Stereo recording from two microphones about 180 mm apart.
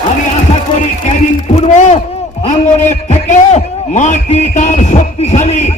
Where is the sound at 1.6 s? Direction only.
40° left (ahead or behind).